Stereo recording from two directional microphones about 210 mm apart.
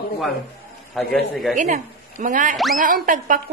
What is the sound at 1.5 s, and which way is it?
Speech, 35° right (ahead or behind).